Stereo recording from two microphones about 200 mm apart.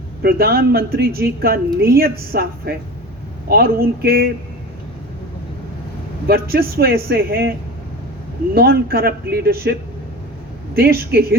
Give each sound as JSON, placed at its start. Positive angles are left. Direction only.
{"t": 0.2, "sound": "a woman's voice", "side_deg": -50}
{"t": 6.2, "sound": "a woman's voice", "side_deg": -50}
{"t": 8.5, "sound": "a woman's voice", "side_deg": -50}
{"t": 10.8, "sound": "a woman's voice", "side_deg": -50}